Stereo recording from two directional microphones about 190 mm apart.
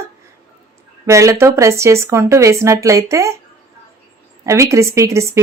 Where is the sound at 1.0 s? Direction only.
15° right (ahead or behind).